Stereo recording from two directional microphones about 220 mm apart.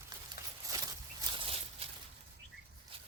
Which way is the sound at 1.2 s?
25° right (ahead or behind).